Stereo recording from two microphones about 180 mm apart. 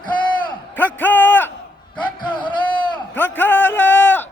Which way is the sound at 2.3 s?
25° left (ahead or behind).